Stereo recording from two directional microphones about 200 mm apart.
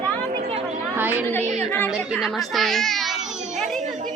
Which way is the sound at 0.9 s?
10° right (ahead or behind).